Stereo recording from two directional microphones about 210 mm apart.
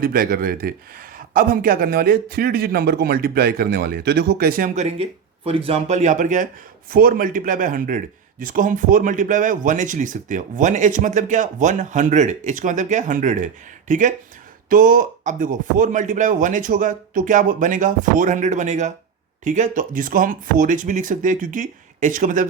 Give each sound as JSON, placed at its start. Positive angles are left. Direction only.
{"t": 0.0, "sound": "speech", "side_deg": -45}